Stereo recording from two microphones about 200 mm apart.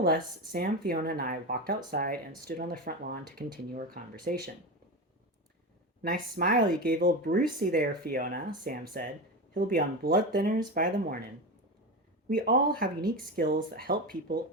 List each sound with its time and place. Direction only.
0.0 s speech: 50° right (ahead or behind)
6.0 s speech: 45° right (ahead or behind)
12.3 s speech: 45° right (ahead or behind)